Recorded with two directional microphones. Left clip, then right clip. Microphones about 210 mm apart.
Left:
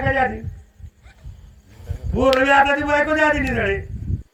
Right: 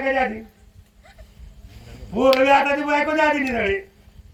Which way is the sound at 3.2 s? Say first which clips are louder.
Left 1 dB; 40° left (ahead or behind).